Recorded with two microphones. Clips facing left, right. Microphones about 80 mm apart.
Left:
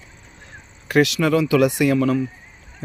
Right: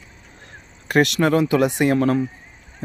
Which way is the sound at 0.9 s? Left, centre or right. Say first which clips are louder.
Even; right.